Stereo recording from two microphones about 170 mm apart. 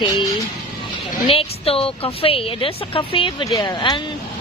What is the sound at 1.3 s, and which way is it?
A woman's voice, 35° left (ahead or behind).